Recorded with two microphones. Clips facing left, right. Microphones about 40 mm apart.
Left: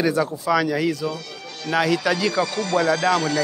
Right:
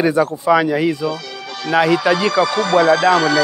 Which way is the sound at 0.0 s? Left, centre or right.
Right.